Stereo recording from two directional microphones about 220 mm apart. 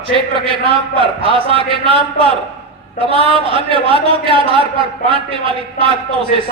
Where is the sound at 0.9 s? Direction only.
25° right (ahead or behind).